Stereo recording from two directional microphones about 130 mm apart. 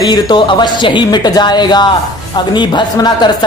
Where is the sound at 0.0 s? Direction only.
35° left (ahead or behind).